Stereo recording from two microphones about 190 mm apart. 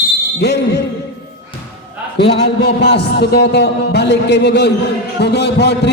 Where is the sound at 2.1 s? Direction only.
60° left (ahead or behind).